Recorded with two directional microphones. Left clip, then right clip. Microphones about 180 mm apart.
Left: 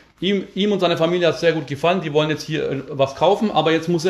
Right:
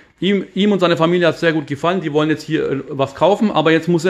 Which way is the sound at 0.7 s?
45° right (ahead or behind).